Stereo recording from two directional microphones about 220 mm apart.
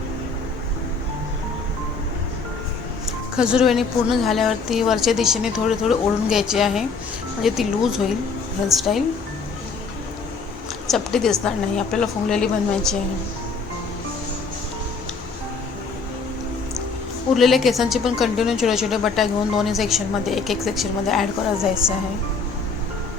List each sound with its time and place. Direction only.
3.3 s a woman's voice: 5° right (ahead or behind)
10.8 s a woman's voice: centre (ahead or behind)
17.3 s a woman's voice: centre (ahead or behind)